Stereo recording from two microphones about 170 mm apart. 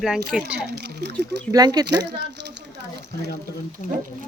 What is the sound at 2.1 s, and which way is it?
Speech, 90° right.